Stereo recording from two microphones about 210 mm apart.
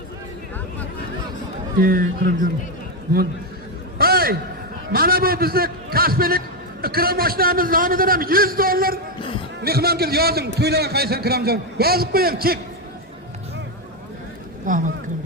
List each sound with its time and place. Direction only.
1.8 s a man's voice: 45° right (ahead or behind)
3.9 s a sound: 45° right (ahead or behind)
4.9 s a man's voice: 45° right (ahead or behind)
14.7 s speech: 40° right (ahead or behind)